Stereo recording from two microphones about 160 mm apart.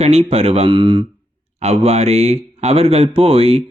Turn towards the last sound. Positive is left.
turn(degrees=-40)  # may be behind; listen again after turning